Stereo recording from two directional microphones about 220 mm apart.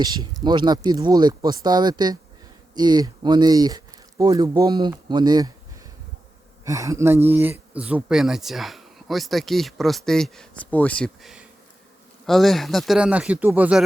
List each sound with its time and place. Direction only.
0.4 s speech: 20° right (ahead or behind)
6.7 s speech: 15° right (ahead or behind)